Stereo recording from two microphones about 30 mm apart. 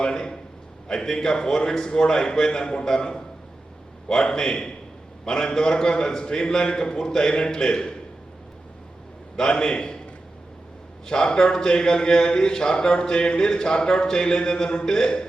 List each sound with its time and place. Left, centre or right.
0.0 s a sound: left
0.9 s a man's voice: left
9.5 s a man's voice: left
11.0 s a man's voice: left